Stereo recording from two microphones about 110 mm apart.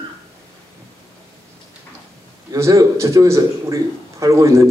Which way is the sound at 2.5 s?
30° right (ahead or behind).